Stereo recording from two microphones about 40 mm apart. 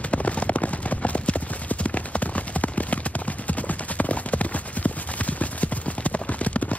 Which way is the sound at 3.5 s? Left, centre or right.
Left.